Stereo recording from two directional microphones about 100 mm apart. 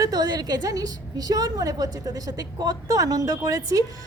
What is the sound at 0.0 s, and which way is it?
A woman's voice, 40° right (ahead or behind).